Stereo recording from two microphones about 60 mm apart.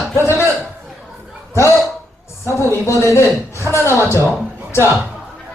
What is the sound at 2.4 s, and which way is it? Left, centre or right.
A woman's voice, left.